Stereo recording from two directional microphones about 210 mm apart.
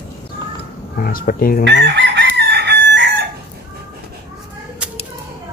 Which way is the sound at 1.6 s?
55° right (ahead or behind).